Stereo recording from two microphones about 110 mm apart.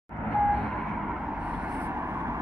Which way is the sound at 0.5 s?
5° right (ahead or behind).